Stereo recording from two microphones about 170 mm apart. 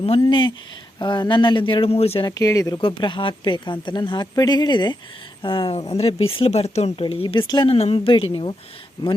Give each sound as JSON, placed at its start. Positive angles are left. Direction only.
{"t": 0.2, "sound": "speech", "side_deg": 30}
{"t": 2.3, "sound": "speech", "side_deg": 20}